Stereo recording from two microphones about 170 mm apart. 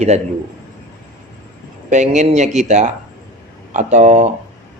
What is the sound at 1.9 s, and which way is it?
A man's voice, 45° right (ahead or behind).